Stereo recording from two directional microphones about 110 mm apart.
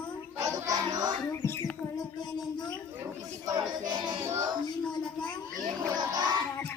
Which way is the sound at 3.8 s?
40° right (ahead or behind).